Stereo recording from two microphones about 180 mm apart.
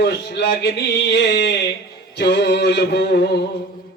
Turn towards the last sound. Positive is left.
turn(degrees=65)  # may be behind; listen again after turning